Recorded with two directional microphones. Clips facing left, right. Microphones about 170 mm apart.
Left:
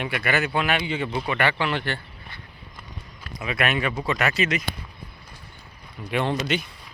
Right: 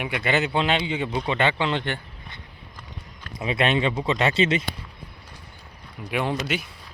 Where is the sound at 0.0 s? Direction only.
20° right (ahead or behind).